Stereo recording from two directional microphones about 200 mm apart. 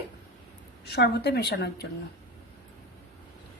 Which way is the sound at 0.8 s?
55° left (ahead or behind).